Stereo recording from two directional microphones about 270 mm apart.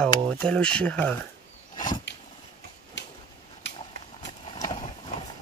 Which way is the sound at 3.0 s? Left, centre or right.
Left.